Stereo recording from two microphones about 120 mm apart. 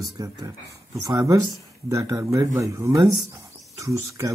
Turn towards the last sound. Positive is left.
turn(degrees=-25)  # may be behind; listen again after turning